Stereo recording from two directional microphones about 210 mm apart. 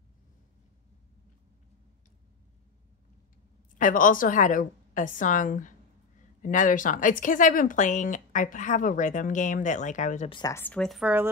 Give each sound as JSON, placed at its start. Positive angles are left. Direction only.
{"t": 3.7, "sound": "speech", "side_deg": 40}
{"t": 10.3, "sound": "speech", "side_deg": 15}